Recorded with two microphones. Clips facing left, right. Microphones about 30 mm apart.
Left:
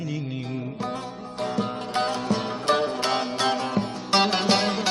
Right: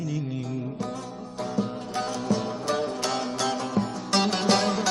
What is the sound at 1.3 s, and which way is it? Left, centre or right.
Music, left.